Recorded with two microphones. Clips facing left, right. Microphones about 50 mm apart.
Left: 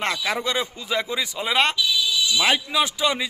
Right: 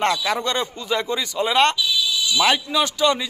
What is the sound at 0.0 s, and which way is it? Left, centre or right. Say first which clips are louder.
A man's voice: right 4 dB; centre.